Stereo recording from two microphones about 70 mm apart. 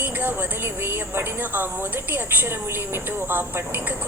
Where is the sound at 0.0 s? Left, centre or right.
Right.